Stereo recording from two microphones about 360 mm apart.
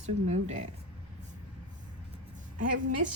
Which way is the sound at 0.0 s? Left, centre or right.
Centre.